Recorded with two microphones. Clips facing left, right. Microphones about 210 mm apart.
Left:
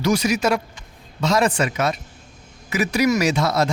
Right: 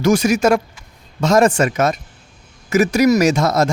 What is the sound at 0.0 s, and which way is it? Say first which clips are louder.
Speech: right 5 dB; 45° right (ahead or behind).